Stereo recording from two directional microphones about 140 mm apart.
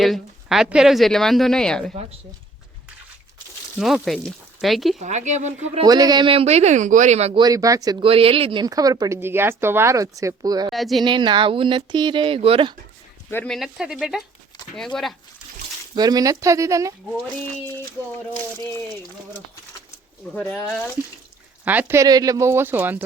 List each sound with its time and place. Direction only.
0.0 s speech: centre (ahead or behind)
3.8 s speech: 5° right (ahead or behind)
4.9 s speech: 60° right (ahead or behind)
5.8 s speech: 30° right (ahead or behind); by 7.3 s 50° right (ahead or behind)
7.3 s speech: 25° right (ahead or behind)
8.0 s speech: 40° right (ahead or behind)
8.6 s speech: 25° right (ahead or behind)
10.7 s speech: centre (ahead or behind)
11.0 s speech: 35° right (ahead or behind)
13.3 s speech: 10° left (ahead or behind)
13.6 s speech: centre (ahead or behind)
16.0 s speech: 30° right (ahead or behind)
21.6 s speech: 10° right (ahead or behind)